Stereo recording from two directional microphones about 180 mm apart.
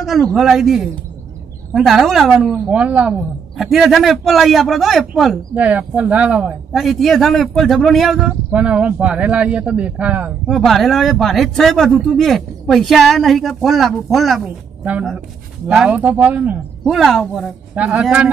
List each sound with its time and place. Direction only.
0.0 s a woman's voice: centre (ahead or behind)